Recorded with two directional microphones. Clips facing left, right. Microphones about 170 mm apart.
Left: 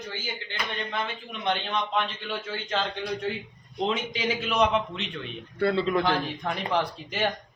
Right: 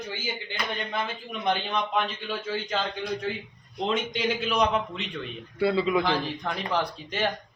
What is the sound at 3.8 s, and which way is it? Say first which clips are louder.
A man's voice: right 1 dB; centre (ahead or behind).